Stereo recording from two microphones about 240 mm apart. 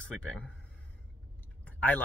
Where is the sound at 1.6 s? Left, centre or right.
Centre.